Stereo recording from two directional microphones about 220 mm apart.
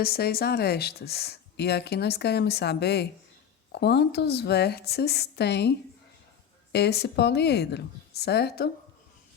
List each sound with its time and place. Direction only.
0.0 s speech: 45° left (ahead or behind)
6.7 s speech: 50° left (ahead or behind)